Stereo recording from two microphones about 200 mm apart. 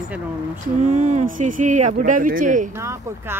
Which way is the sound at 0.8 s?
40° right (ahead or behind).